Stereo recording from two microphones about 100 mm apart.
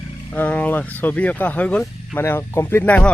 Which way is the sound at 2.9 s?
15° left (ahead or behind).